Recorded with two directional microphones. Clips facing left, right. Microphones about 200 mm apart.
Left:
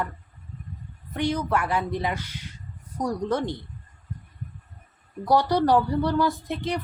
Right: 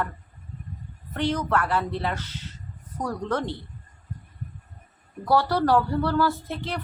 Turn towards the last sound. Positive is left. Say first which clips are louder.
# left 3 dB
turn(degrees=15)  # may be behind; listen again after turning